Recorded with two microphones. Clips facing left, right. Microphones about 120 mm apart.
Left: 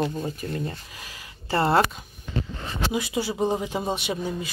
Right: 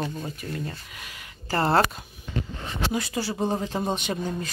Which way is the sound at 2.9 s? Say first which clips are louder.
Left 3 dB; 15° left (ahead or behind).